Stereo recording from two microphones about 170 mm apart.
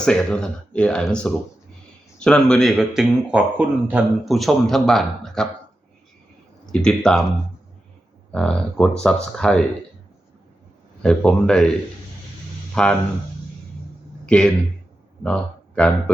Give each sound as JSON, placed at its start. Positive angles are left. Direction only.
{"t": 0.0, "sound": "a man's voice", "side_deg": 5}
{"t": 6.7, "sound": "a man's voice", "side_deg": 5}
{"t": 8.3, "sound": "a man's voice", "side_deg": 5}
{"t": 11.0, "sound": "a man's voice", "side_deg": 5}
{"t": 12.7, "sound": "speech", "side_deg": 5}
{"t": 14.3, "sound": "speech", "side_deg": 5}